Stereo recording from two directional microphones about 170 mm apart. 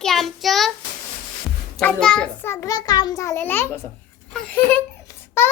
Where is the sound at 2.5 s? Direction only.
20° left (ahead or behind).